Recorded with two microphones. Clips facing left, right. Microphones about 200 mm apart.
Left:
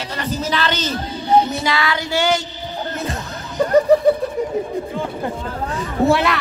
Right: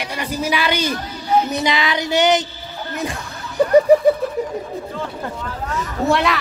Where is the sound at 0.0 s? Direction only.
10° right (ahead or behind).